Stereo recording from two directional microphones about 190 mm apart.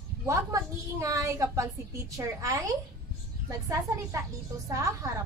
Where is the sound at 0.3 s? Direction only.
15° right (ahead or behind).